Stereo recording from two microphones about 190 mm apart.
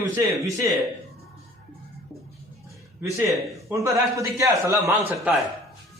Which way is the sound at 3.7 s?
15° right (ahead or behind).